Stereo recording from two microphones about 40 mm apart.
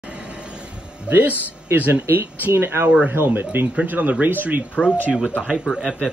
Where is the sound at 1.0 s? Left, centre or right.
Right.